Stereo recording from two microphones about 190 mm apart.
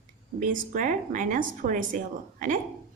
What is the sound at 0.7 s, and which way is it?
A woman's voice, 45° right (ahead or behind).